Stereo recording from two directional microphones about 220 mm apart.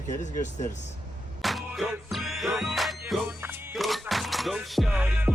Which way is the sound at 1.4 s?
Centre (ahead or behind).